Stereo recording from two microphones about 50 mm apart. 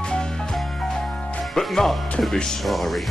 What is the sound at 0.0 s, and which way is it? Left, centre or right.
Music, centre.